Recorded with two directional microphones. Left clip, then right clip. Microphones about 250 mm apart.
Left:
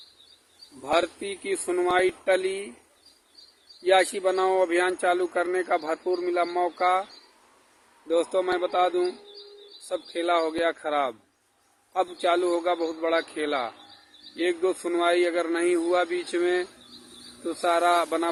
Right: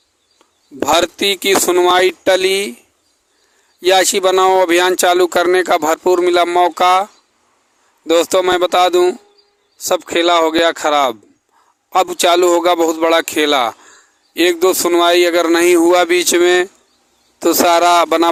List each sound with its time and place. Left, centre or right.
0.9 s speech: right
3.8 s speech: right
12.2 s speech: right